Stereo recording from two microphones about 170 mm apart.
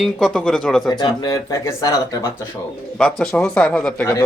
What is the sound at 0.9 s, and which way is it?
Speech, 25° left (ahead or behind).